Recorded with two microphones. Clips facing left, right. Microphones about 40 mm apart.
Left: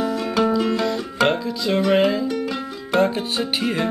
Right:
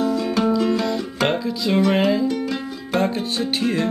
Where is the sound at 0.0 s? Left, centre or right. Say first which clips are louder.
Even; centre.